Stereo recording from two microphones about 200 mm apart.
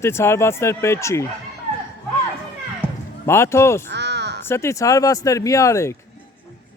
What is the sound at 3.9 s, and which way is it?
Crow, 60° right (ahead or behind).